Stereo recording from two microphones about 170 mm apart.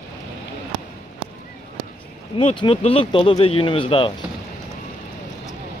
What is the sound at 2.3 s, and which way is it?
Speech, 30° left (ahead or behind).